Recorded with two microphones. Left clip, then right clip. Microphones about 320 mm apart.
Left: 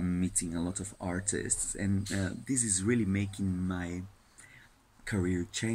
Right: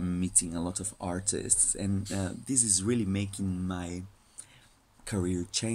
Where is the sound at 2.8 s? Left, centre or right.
Right.